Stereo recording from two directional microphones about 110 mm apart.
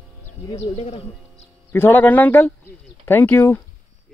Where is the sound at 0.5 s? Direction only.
85° left.